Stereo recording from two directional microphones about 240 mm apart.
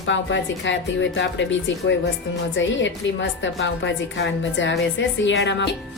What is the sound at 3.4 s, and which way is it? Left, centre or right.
A woman's voice, left.